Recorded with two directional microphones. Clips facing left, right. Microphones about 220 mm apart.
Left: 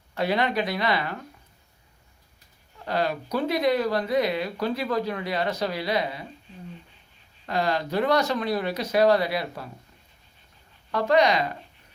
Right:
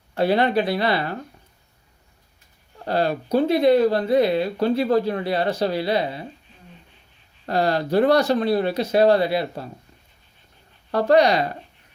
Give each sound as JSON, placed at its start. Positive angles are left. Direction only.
{"t": 0.1, "sound": "speech", "side_deg": -35}
{"t": 2.7, "sound": "speech", "side_deg": -35}
{"t": 7.4, "sound": "speech", "side_deg": -35}
{"t": 10.9, "sound": "speech", "side_deg": -35}